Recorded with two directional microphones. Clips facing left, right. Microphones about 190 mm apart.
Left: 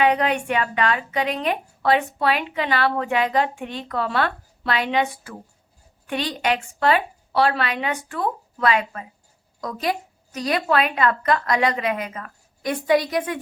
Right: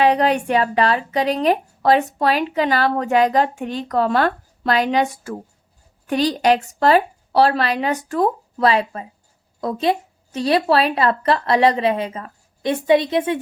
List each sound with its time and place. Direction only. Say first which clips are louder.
0.0 s a woman's voice: right 4 dB; 35° right (ahead or behind)